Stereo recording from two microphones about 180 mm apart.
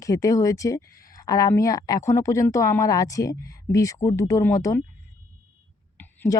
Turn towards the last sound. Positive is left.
turn(degrees=10)  # may be behind; listen again after turning